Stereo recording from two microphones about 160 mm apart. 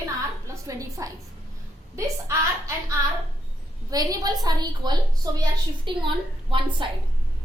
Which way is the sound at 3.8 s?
25° right (ahead or behind).